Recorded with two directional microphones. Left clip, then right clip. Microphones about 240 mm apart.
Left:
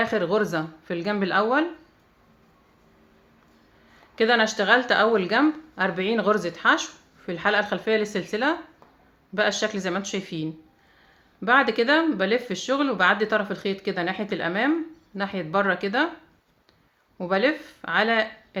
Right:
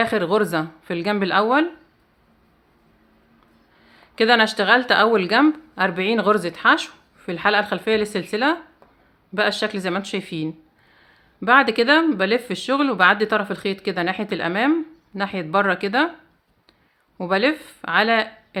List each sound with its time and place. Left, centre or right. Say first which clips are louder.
0.0 s speech: right 4 dB; right
3.8 s speech: right 4 dB; right
17.2 s speech: right 3 dB; right